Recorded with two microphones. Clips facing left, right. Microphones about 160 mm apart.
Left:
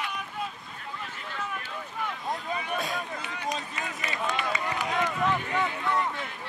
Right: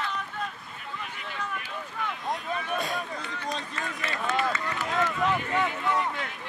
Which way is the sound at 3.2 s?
15° left (ahead or behind).